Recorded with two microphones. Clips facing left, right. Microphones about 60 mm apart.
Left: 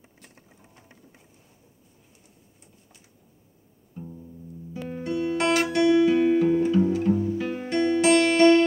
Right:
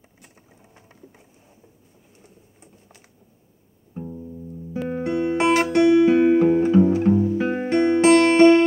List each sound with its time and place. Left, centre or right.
3.9 s music: right